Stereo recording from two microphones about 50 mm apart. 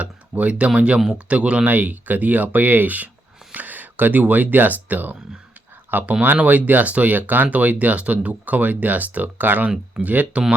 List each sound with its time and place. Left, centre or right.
0.0 s a sound: right
0.8 s speech: right
1.7 s speech: right